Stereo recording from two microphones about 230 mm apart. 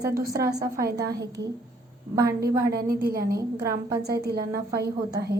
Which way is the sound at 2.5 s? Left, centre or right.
Centre.